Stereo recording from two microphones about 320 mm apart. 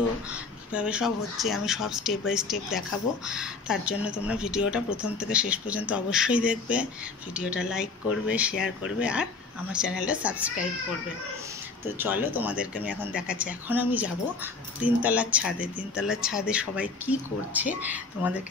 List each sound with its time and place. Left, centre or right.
0.3 s speech: centre
12.0 s speech: centre